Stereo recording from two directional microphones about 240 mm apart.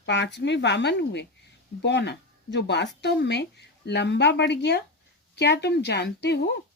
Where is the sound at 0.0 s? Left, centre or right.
Left.